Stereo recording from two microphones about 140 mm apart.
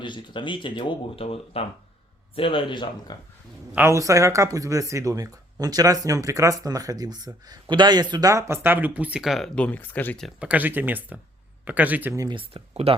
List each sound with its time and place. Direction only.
0.0 s speech: 35° left (ahead or behind)
3.8 s speech: 20° right (ahead or behind); by 9.5 s 5° right (ahead or behind)
9.6 s speech: 10° left (ahead or behind)
10.2 s speech: 10° right (ahead or behind)
12.3 s speech: 40° right (ahead or behind)